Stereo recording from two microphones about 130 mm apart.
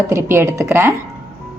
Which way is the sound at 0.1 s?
20° right (ahead or behind).